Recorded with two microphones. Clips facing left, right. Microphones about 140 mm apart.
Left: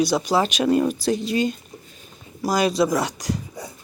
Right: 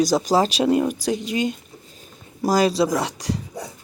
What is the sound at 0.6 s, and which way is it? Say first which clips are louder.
Speech: even; 15° right (ahead or behind).